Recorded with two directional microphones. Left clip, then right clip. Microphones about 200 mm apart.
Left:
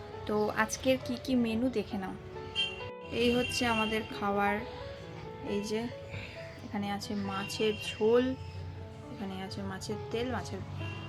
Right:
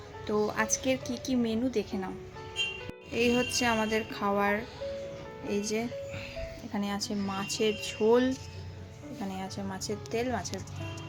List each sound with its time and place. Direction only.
0.3 s a woman's voice: centre (ahead or behind)
3.2 s a woman's voice: 10° right (ahead or behind)
9.3 s a woman's voice: 20° right (ahead or behind)